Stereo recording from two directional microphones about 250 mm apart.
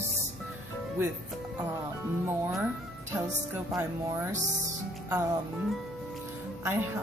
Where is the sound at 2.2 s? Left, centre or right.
Centre.